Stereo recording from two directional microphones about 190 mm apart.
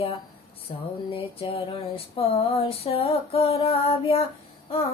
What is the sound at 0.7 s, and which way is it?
Music, 25° left (ahead or behind).